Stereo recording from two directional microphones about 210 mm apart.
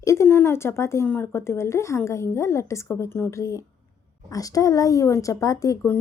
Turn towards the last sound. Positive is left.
turn(degrees=15)  # may be behind; listen again after turning